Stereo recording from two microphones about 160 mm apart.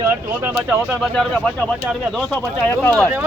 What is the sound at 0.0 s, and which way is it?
Speech, 15° right (ahead or behind).